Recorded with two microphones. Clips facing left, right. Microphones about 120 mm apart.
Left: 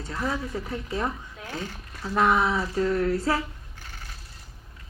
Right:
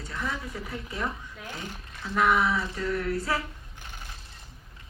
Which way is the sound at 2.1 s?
30° left (ahead or behind).